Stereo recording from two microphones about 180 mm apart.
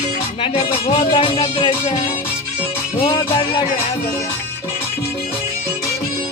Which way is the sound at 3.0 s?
30° left (ahead or behind).